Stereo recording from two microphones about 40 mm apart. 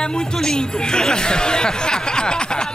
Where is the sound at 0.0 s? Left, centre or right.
Centre.